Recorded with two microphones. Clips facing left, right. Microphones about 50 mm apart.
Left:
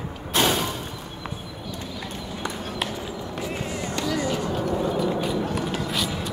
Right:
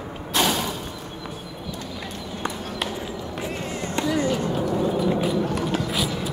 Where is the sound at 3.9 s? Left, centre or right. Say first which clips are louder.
Right 4 dB; right.